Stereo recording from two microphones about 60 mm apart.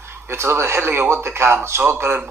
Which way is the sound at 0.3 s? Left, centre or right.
Right.